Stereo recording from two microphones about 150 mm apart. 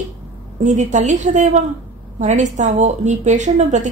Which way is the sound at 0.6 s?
50° right (ahead or behind).